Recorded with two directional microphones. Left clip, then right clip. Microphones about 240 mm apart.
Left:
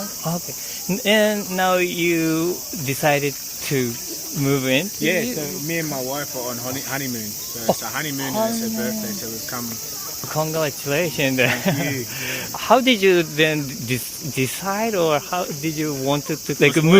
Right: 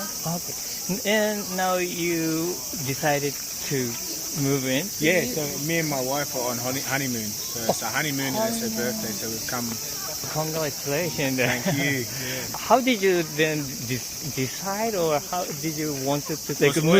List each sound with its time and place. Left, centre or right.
1.0 s speech: left
5.0 s speech: centre
8.3 s speech: left
10.3 s speech: left